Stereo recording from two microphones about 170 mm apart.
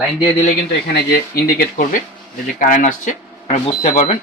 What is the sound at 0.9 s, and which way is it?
Speech, 65° left (ahead or behind).